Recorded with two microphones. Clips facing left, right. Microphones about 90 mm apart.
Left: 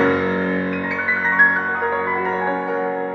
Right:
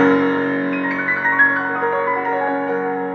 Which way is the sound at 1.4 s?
5° left (ahead or behind).